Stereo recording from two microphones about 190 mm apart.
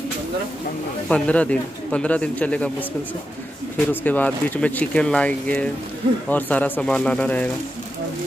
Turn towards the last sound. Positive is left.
turn(degrees=5)  # may be behind; listen again after turning